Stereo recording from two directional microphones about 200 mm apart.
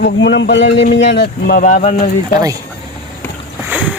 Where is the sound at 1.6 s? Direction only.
35° left (ahead or behind).